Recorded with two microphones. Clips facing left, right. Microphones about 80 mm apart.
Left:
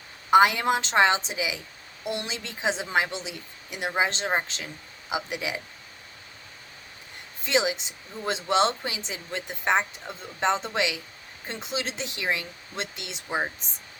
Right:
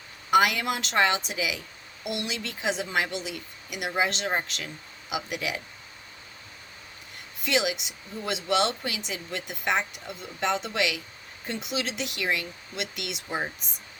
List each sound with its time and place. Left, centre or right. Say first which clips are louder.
0.3 s a woman's voice: left 3 dB; left
7.4 s a woman's voice: left 1 dB; left